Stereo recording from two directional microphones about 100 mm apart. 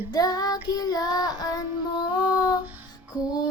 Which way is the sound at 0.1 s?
40° left (ahead or behind).